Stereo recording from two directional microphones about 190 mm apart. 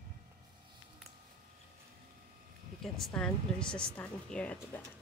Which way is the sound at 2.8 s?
5° left (ahead or behind).